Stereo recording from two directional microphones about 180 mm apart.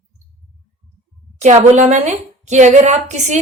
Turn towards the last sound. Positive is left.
turn(degrees=-40)  # may be behind; listen again after turning